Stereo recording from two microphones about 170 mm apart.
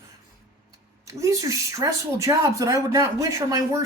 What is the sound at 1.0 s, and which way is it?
Speech, 20° right (ahead or behind).